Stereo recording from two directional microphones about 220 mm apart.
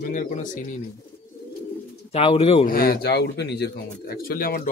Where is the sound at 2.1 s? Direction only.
25° left (ahead or behind).